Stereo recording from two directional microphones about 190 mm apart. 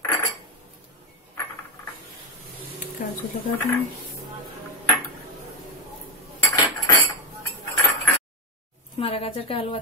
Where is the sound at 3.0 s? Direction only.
45° left (ahead or behind).